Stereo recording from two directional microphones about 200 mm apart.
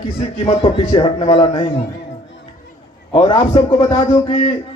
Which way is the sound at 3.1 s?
25° left (ahead or behind).